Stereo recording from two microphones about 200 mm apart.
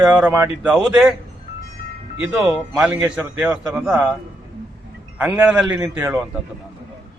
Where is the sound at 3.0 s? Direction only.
10° right (ahead or behind).